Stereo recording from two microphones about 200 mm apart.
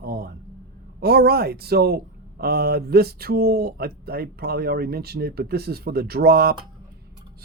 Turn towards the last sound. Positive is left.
turn(degrees=-50)  # may be behind; listen again after turning